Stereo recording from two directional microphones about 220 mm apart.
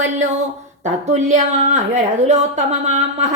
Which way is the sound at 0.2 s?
30° right (ahead or behind).